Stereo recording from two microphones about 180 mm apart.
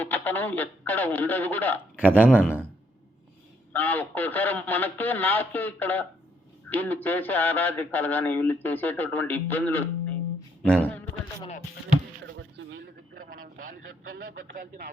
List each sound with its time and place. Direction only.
0.0 s speech: 10° left (ahead or behind)
2.0 s a man's voice: 10° right (ahead or behind)
3.7 s speech: 10° left (ahead or behind)
10.6 s a sound: 5° left (ahead or behind)
12.2 s a sound: 80° right
14.1 s speech: 65° right (ahead or behind)